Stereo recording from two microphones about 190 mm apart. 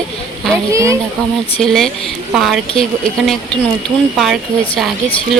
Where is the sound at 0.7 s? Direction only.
15° right (ahead or behind).